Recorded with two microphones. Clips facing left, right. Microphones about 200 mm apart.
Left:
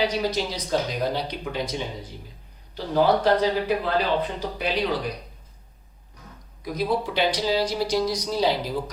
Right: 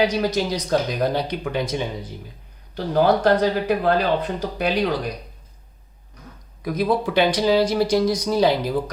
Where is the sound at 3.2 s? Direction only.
50° right (ahead or behind).